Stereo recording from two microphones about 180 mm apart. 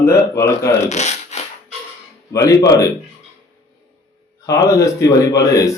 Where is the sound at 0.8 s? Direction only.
40° left (ahead or behind).